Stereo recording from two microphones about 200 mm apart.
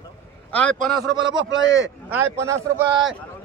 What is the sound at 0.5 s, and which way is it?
Speech, 5° left (ahead or behind).